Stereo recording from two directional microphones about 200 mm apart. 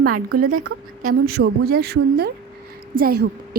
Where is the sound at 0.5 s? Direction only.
90° right.